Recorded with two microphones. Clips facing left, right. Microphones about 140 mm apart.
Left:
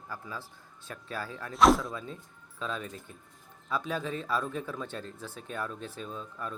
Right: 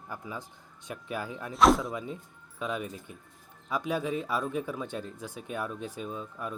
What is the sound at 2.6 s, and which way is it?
Speech, 15° right (ahead or behind).